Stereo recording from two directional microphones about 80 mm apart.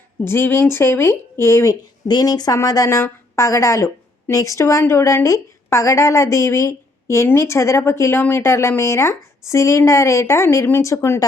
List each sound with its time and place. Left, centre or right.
0.3 s a woman's voice: left
2.0 s a woman's voice: left